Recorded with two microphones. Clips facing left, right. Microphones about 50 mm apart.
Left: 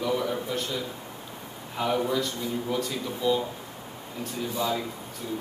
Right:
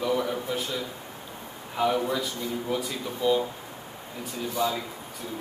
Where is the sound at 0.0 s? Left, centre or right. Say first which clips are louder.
Right 1 dB; centre.